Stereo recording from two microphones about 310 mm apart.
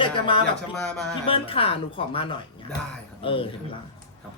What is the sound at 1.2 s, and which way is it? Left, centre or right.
Speech, centre.